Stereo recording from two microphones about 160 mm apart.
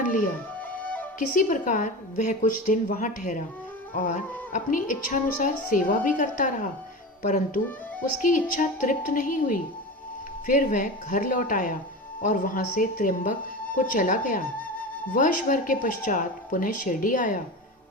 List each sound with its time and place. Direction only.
1.3 s a woman's voice: 55° left (ahead or behind)